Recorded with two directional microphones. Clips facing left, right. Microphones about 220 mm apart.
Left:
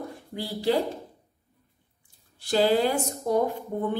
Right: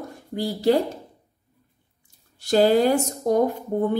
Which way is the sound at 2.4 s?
45° right (ahead or behind).